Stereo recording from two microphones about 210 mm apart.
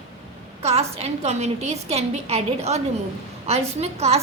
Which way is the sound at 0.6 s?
30° right (ahead or behind).